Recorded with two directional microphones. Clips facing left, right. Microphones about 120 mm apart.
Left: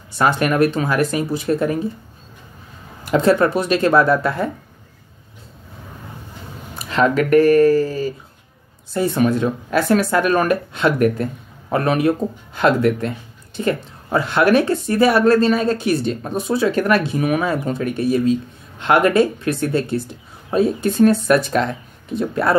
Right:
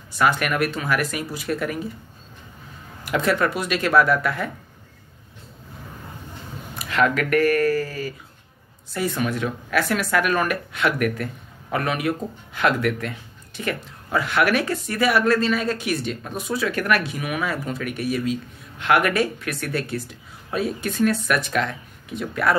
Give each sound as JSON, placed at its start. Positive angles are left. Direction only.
{"t": 0.2, "sound": "speech", "side_deg": 30}
{"t": 3.1, "sound": "speech", "side_deg": 30}
{"t": 6.9, "sound": "speech", "side_deg": 30}